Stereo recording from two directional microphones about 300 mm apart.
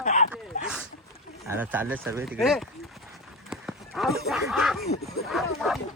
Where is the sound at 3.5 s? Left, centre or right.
Centre.